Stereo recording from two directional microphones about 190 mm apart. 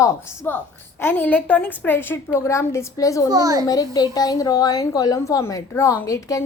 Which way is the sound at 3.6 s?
20° left (ahead or behind).